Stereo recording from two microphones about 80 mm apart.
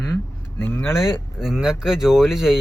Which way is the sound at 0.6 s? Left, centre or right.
Left.